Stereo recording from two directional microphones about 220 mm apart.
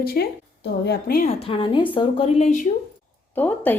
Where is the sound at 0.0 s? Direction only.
45° left (ahead or behind).